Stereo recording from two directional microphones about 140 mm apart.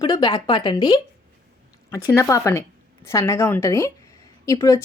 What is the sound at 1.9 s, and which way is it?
Speech, 20° left (ahead or behind).